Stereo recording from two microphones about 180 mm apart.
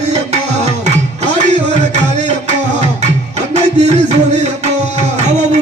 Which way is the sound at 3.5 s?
40° right (ahead or behind).